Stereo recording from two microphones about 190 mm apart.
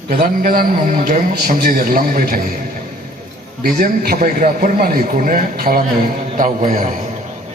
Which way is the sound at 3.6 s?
50° right (ahead or behind).